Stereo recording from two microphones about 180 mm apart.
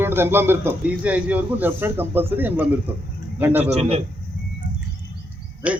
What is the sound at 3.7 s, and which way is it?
Speech, 35° right (ahead or behind).